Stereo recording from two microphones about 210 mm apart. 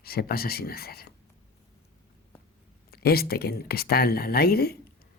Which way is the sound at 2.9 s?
45° left (ahead or behind).